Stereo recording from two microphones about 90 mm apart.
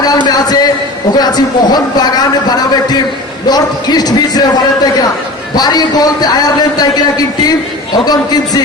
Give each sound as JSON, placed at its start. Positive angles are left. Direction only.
{"t": 0.0, "sound": "a man's voice", "side_deg": 50}
{"t": 5.5, "sound": "a man's voice", "side_deg": 45}